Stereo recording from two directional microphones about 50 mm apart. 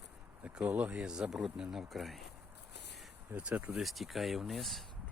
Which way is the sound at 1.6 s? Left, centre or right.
Centre.